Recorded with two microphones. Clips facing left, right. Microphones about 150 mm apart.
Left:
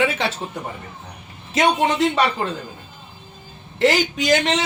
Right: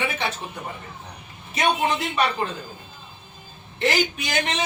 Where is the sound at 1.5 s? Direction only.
90° left.